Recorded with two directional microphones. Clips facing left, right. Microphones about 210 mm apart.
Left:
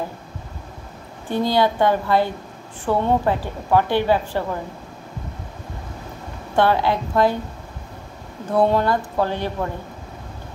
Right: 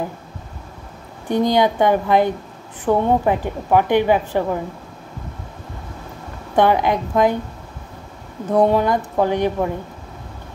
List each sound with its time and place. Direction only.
1.3 s a woman's voice: 15° right (ahead or behind)
6.5 s a woman's voice: 15° right (ahead or behind)
8.5 s a woman's voice: 15° right (ahead or behind)